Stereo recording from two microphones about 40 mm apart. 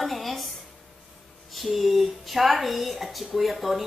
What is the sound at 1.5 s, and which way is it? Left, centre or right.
Speech, centre.